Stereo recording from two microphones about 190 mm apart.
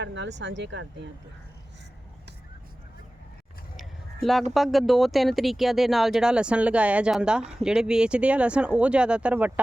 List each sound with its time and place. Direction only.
0.0 s speech: 70° right (ahead or behind)
3.8 s a sound: centre (ahead or behind)
4.5 s speech: centre (ahead or behind)